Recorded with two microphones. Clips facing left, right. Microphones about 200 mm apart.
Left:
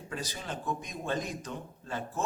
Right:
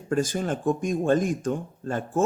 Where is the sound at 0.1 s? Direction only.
50° right (ahead or behind).